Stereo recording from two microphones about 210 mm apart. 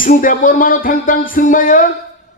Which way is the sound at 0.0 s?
40° left (ahead or behind).